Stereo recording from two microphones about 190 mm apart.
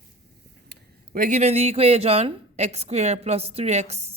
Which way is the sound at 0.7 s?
45° right (ahead or behind).